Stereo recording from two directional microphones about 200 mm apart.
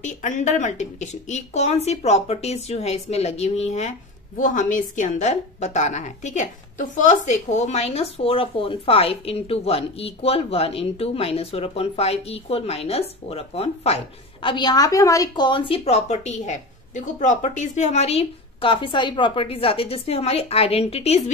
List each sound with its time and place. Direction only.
0.0 s a woman's voice: 40° left (ahead or behind)